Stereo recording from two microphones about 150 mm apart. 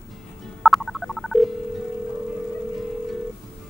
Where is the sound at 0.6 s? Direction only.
Centre (ahead or behind).